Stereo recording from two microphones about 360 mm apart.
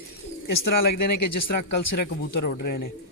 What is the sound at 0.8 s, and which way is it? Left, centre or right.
Speech, left.